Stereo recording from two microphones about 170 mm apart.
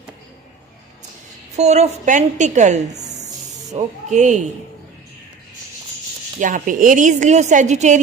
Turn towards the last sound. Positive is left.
turn(degrees=-45)  # may be behind; listen again after turning